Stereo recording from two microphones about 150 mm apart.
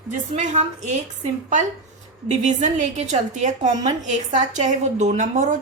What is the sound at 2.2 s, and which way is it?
A woman's voice, 50° right (ahead or behind).